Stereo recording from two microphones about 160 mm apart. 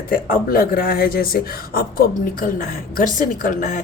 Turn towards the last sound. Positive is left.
turn(degrees=55)  # may be behind; listen again after turning